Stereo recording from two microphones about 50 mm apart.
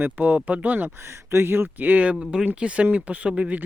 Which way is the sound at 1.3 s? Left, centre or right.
Right.